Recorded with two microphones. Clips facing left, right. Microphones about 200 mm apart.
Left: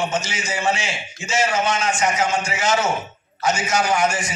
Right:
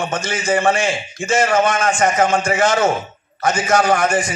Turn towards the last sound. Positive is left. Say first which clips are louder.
# right 4 dB
turn(degrees=-55)  # may be behind; listen again after turning